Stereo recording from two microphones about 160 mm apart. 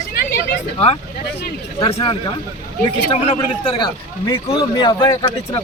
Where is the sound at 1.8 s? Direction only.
35° left (ahead or behind).